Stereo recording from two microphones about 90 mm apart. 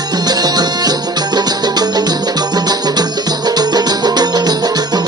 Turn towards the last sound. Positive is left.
turn(degrees=-50)  # may be behind; listen again after turning